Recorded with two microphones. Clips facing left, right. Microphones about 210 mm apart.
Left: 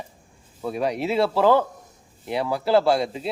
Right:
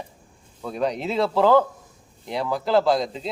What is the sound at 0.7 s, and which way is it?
A man's voice, 10° left (ahead or behind).